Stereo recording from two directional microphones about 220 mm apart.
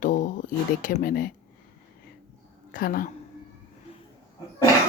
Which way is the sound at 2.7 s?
40° left (ahead or behind).